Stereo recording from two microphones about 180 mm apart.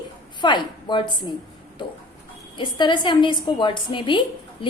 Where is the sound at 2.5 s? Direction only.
25° left (ahead or behind).